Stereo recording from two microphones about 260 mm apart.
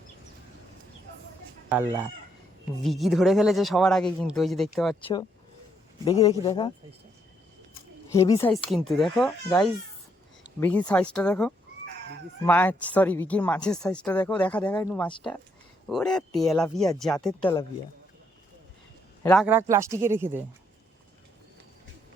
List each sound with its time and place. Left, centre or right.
1.7 s speech: centre
4.9 s speech: centre
8.1 s speech: centre
19.2 s a man's voice: centre
19.5 s speech: centre